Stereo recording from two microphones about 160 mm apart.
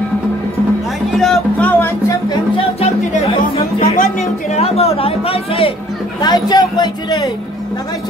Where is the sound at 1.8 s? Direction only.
20° left (ahead or behind).